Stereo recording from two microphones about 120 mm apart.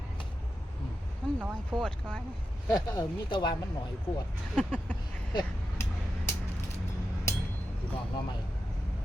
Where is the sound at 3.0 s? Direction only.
40° left (ahead or behind).